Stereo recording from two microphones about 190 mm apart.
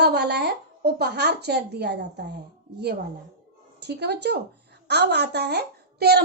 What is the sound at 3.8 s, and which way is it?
A woman's voice, 60° right (ahead or behind).